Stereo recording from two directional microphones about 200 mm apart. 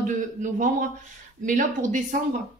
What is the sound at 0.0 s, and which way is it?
A man's voice, 40° right (ahead or behind).